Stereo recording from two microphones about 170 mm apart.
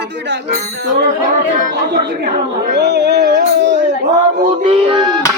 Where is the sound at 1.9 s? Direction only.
75° right (ahead or behind).